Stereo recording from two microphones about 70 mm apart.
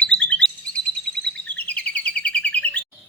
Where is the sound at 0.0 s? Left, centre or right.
Centre.